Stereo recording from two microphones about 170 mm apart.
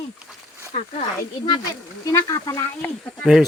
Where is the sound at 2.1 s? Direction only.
20° left (ahead or behind).